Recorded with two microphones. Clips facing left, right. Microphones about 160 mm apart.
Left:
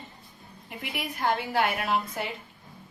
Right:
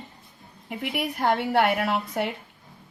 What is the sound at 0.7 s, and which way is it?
Speech, 65° right (ahead or behind).